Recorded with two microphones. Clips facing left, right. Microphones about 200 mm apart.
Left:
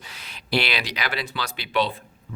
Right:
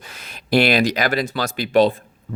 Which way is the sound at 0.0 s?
50° right (ahead or behind).